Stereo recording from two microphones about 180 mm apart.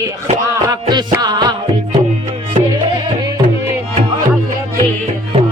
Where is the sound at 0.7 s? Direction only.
25° right (ahead or behind).